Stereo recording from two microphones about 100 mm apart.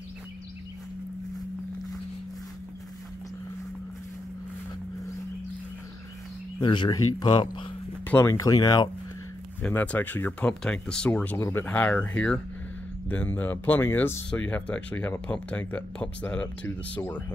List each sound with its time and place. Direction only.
6.6 s speech: 50° left (ahead or behind)
8.1 s speech: 30° left (ahead or behind)
9.6 s speech: 15° left (ahead or behind)
10.6 s speech: 10° left (ahead or behind)